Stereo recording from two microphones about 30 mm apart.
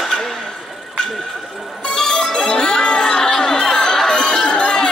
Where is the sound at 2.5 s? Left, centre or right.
Left.